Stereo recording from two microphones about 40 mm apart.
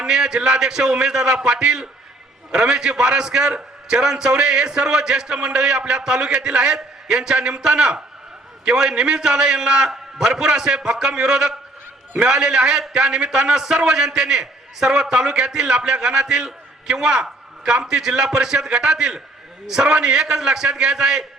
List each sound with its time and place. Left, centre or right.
0.0 s a man's voice: centre